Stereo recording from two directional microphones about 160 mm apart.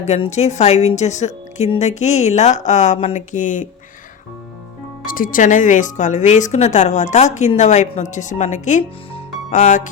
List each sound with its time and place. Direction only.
0.2 s speech: 45° left (ahead or behind)
5.0 s speech: 60° left (ahead or behind)